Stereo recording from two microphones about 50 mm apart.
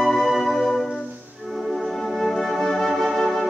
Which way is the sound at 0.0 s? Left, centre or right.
Centre.